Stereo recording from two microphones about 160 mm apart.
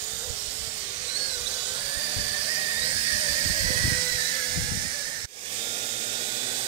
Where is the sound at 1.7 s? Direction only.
35° right (ahead or behind).